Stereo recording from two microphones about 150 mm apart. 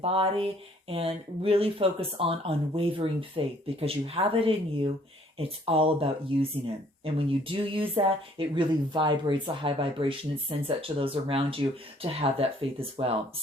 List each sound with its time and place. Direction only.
0.0 s speech: 40° right (ahead or behind)